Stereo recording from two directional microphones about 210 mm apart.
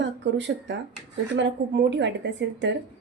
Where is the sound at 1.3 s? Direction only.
60° right (ahead or behind).